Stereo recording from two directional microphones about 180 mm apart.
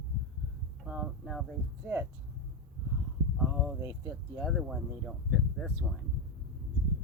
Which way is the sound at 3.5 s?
10° right (ahead or behind).